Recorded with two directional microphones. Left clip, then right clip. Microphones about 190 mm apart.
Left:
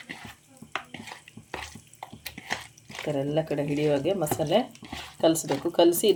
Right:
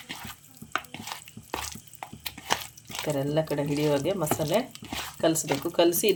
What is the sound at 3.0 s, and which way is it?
Speech, 20° right (ahead or behind).